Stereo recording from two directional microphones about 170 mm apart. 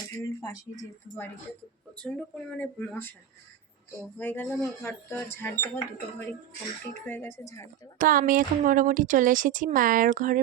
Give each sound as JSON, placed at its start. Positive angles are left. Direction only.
{"t": 0.4, "sound": "speech", "side_deg": 20}
{"t": 2.0, "sound": "speech", "side_deg": 5}
{"t": 4.2, "sound": "speech", "side_deg": 10}
{"t": 7.9, "sound": "a woman's voice", "side_deg": -55}